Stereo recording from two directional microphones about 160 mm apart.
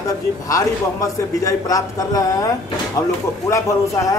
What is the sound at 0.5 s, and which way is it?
A man's voice, 20° left (ahead or behind).